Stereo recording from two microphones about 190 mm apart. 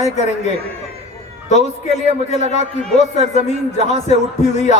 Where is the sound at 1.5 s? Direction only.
35° left (ahead or behind).